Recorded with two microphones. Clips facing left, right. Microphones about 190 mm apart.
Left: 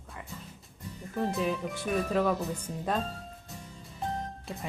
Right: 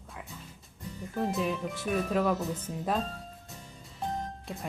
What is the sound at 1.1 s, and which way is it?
Speech, centre (ahead or behind).